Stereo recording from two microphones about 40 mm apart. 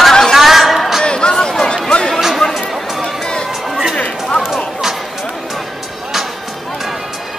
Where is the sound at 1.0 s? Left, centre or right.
Left.